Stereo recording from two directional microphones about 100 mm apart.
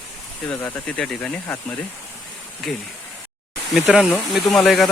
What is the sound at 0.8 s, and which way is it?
Speech, 5° left (ahead or behind).